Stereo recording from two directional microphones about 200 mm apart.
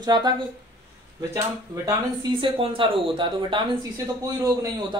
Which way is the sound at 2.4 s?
25° right (ahead or behind).